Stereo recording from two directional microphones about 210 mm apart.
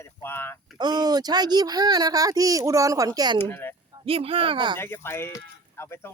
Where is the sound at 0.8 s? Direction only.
20° right (ahead or behind).